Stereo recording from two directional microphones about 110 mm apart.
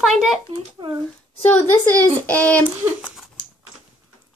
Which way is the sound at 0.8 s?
50° right (ahead or behind).